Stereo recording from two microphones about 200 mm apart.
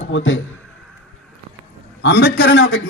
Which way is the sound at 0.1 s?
70° left (ahead or behind).